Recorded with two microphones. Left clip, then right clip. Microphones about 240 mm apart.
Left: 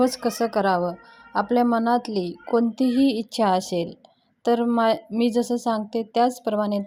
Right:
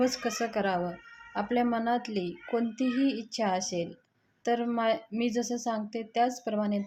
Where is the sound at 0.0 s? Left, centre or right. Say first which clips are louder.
Left 7 dB; left.